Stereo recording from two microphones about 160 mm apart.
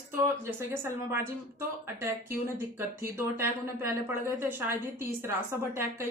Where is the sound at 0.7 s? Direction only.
15° right (ahead or behind).